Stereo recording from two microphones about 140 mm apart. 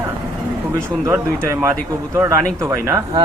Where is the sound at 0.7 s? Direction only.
20° right (ahead or behind).